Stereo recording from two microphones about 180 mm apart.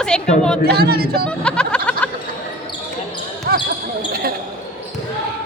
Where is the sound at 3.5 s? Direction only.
60° right (ahead or behind).